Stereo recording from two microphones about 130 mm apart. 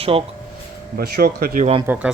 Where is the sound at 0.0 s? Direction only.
45° right (ahead or behind).